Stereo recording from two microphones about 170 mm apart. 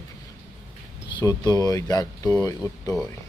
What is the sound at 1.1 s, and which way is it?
Speech, 20° left (ahead or behind).